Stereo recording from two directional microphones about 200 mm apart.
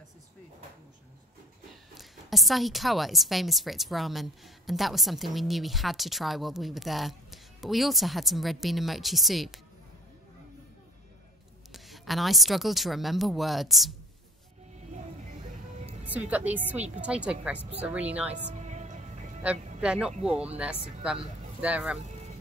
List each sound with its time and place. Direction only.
2.0 s a woman's voice: centre (ahead or behind)
11.7 s a woman's voice: centre (ahead or behind)
16.0 s a woman's voice: 5° right (ahead or behind)
18.5 s music: 35° right (ahead or behind)
19.4 s a woman's voice: 5° right (ahead or behind)